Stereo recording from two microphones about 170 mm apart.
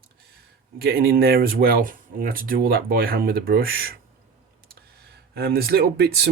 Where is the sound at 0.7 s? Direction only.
65° right (ahead or behind).